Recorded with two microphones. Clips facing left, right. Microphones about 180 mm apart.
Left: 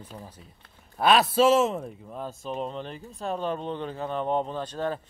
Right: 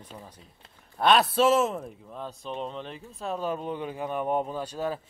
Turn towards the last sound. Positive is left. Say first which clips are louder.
# left 1 dB
turn(degrees=-10)  # may be behind; listen again after turning